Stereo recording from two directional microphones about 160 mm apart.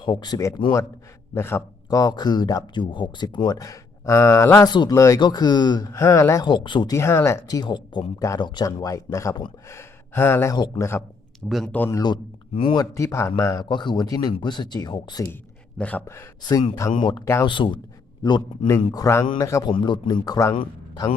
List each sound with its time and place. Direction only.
0.0 s speech: 25° left (ahead or behind)
6.9 s speech: 15° left (ahead or behind)
11.4 s speech: centre (ahead or behind)
11.9 s speech: 25° left (ahead or behind)
15.8 s speech: 10° left (ahead or behind)
16.4 s a man's voice: 25° left (ahead or behind)